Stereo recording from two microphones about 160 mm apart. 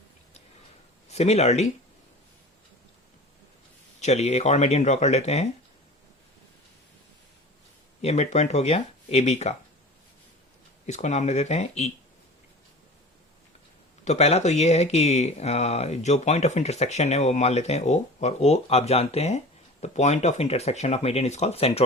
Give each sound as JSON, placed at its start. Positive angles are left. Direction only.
{"t": 1.0, "sound": "speech", "side_deg": 45}
{"t": 4.0, "sound": "speech", "side_deg": 45}
{"t": 8.0, "sound": "speech", "side_deg": 45}
{"t": 10.8, "sound": "speech", "side_deg": 45}
{"t": 14.0, "sound": "speech", "side_deg": 45}